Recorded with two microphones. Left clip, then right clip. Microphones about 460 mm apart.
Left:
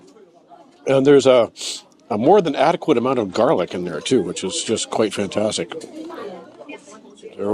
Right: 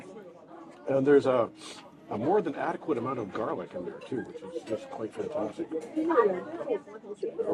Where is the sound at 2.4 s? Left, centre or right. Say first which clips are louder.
Left 13 dB; left.